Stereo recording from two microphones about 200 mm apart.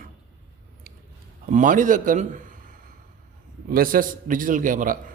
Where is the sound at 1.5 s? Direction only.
40° right (ahead or behind).